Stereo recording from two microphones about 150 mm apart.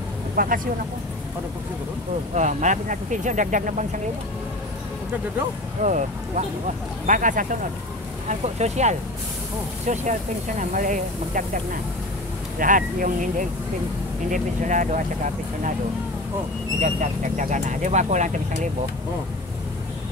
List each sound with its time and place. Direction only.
0.4 s speech: 70° right (ahead or behind)
2.3 s speech: 55° right (ahead or behind)
5.8 s speech: 55° right (ahead or behind)
8.3 s speech: 50° right (ahead or behind)
16.8 s speech: 55° right (ahead or behind)